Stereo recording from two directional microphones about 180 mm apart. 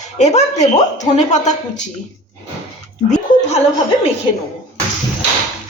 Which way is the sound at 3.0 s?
40° left (ahead or behind).